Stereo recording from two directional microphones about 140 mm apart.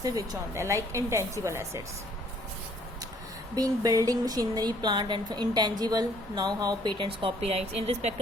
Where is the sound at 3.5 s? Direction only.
25° right (ahead or behind).